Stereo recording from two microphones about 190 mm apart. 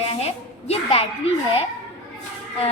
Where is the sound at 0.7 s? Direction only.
30° left (ahead or behind).